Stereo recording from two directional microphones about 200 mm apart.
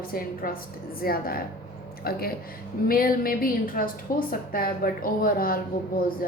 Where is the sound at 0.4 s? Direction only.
45° left (ahead or behind).